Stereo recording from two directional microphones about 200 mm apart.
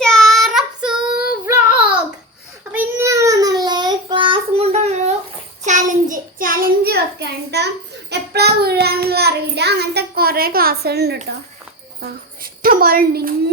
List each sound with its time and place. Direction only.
0.0 s child singing: centre (ahead or behind)
2.7 s child singing: 10° right (ahead or behind); by 11.2 s 55° right (ahead or behind)
11.9 s a sound: 45° right (ahead or behind)